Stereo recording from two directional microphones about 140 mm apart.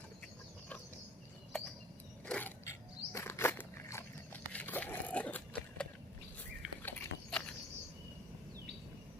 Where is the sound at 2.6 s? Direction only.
20° left (ahead or behind).